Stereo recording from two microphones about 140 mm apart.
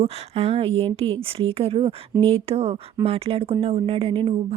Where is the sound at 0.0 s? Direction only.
45° right (ahead or behind).